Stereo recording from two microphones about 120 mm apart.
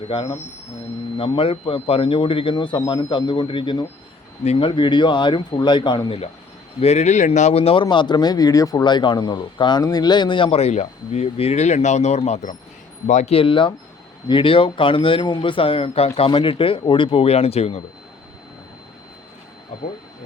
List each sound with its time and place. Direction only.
0.1 s speech: 45° left (ahead or behind)
1.4 s speech: 50° left (ahead or behind)
6.7 s speech: 60° left (ahead or behind); by 12.5 s 80° left
13.1 s speech: 90° left
13.3 s speech: 45° left (ahead or behind)